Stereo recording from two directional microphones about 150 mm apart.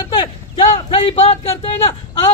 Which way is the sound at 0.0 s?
35° left (ahead or behind).